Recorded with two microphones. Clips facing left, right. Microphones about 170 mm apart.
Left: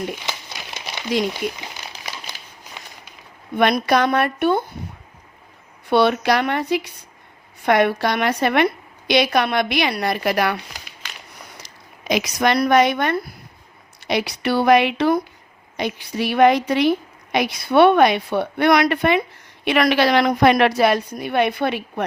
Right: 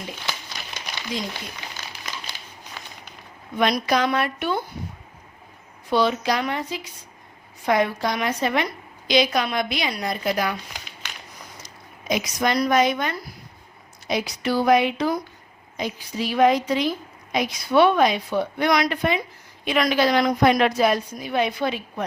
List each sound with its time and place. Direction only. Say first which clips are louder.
3.5 s speech: left 4 dB; 60° left (ahead or behind)
5.9 s a woman's voice: left 4 dB; 65° left (ahead or behind)
11.6 s speech: left 4 dB; 80° left; by 13.3 s 60° left (ahead or behind)
14.0 s a woman's voice: left 3 dB; 75° left (ahead or behind)